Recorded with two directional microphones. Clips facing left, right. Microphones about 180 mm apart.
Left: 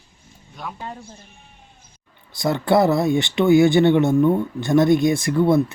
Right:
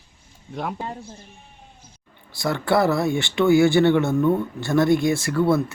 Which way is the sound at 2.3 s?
20° left (ahead or behind).